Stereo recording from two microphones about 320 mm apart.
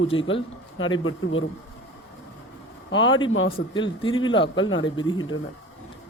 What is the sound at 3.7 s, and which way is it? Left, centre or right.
Speech, centre.